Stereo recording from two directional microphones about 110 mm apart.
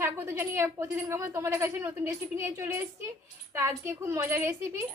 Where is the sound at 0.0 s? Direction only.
20° right (ahead or behind).